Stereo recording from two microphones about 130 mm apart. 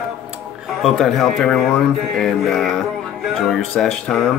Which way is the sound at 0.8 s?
Centre (ahead or behind).